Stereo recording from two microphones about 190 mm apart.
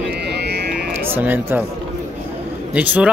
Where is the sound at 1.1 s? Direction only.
10° right (ahead or behind).